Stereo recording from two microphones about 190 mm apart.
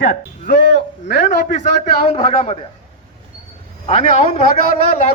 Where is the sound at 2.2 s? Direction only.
30° left (ahead or behind).